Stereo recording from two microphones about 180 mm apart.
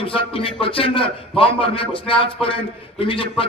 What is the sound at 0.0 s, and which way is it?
A man's voice, 30° left (ahead or behind).